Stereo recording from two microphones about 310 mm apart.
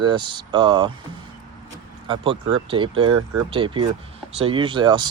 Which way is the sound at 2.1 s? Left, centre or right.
Centre.